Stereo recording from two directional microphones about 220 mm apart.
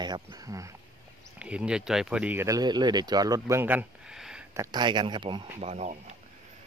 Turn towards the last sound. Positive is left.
turn(degrees=-30)  # may be behind; listen again after turning